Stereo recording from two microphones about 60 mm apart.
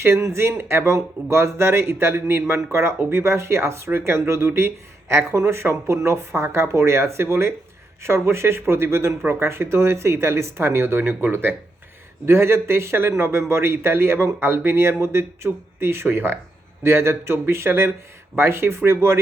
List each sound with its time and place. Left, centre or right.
0.0 s speech: right